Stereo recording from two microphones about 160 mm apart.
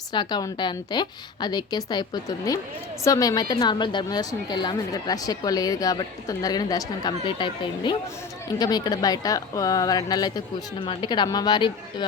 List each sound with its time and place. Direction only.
0.1 s a woman's voice: 25° left (ahead or behind)